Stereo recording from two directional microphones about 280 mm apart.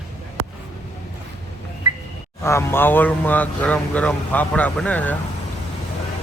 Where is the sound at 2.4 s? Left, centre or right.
Centre.